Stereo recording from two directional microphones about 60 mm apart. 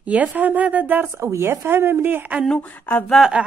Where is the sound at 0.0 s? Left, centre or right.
Right.